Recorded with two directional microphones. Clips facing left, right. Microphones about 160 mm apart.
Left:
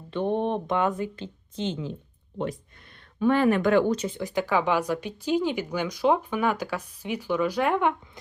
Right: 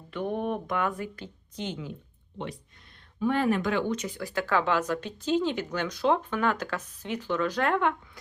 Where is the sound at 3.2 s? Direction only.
75° left (ahead or behind); by 3.9 s 50° left (ahead or behind).